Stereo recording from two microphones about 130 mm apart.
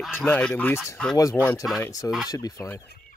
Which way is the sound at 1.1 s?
25° left (ahead or behind).